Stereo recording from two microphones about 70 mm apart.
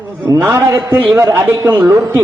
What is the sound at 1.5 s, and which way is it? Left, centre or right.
Speech, right.